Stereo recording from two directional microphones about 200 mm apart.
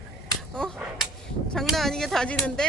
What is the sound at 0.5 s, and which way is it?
Speech, centre (ahead or behind).